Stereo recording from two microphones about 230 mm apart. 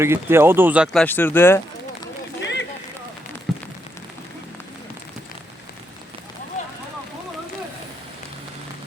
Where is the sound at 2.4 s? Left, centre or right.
Left.